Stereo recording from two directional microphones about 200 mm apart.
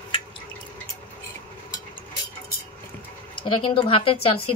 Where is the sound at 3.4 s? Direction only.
25° left (ahead or behind).